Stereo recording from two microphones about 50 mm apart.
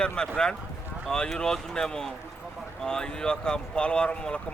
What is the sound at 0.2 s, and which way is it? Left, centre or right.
Speech, centre.